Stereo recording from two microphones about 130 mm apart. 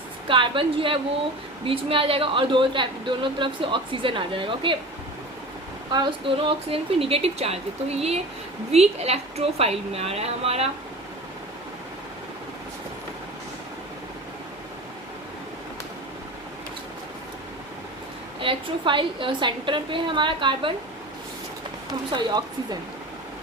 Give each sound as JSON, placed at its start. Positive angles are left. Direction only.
{"t": 0.3, "sound": "a woman's voice", "side_deg": -40}
{"t": 5.9, "sound": "a woman's voice", "side_deg": -40}
{"t": 18.3, "sound": "a woman's voice", "side_deg": -40}
{"t": 22.1, "sound": "a woman's voice", "side_deg": -35}